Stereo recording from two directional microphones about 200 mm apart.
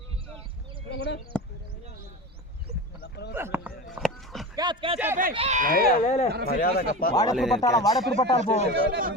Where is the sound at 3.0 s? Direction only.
55° left (ahead or behind).